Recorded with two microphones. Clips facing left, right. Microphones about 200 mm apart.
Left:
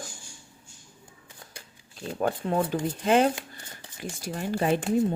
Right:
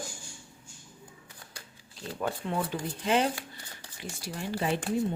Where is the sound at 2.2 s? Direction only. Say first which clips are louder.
Left 6 dB; 45° left (ahead or behind).